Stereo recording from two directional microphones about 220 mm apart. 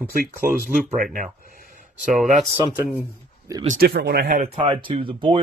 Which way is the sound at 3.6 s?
45° right (ahead or behind).